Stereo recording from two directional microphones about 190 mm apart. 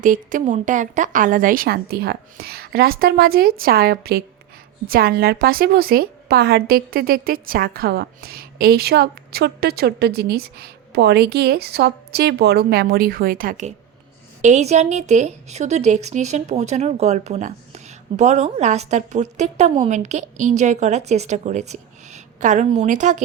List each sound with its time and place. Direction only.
0.0 s a woman's voice: 45° right (ahead or behind)